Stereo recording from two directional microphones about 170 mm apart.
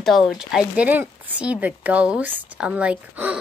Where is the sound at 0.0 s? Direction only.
Centre (ahead or behind).